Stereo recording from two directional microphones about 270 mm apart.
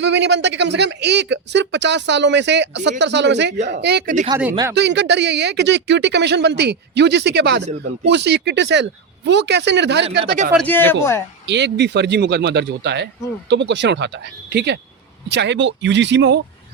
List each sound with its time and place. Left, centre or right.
0.0 s speech: right
10.7 s speech: centre
11.4 s speech: right